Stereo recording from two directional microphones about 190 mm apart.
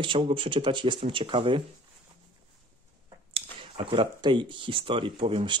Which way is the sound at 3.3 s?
30° right (ahead or behind).